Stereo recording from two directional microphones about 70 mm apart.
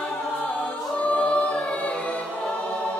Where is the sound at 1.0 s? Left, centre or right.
Centre.